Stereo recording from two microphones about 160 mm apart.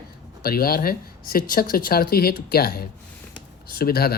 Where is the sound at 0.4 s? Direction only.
70° left (ahead or behind).